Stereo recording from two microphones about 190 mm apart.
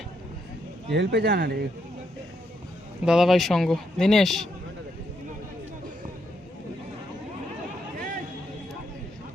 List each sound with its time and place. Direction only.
0.9 s speech: 60° right (ahead or behind)
3.0 s speech: 5° right (ahead or behind)